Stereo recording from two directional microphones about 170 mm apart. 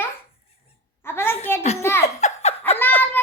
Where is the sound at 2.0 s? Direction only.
40° left (ahead or behind).